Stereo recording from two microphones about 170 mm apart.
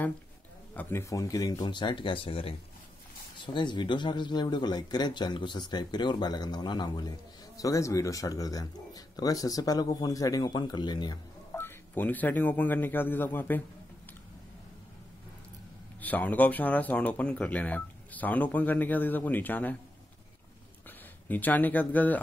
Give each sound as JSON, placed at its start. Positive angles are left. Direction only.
{"t": 0.7, "sound": "speech", "side_deg": 15}
{"t": 11.5, "sound": "speech", "side_deg": 10}
{"t": 16.0, "sound": "speech", "side_deg": 10}
{"t": 21.3, "sound": "speech", "side_deg": 10}